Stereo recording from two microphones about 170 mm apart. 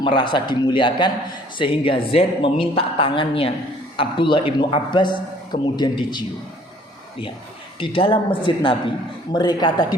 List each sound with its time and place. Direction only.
0.0 s a man's voice: 30° left (ahead or behind)
7.8 s a man's voice: 30° left (ahead or behind)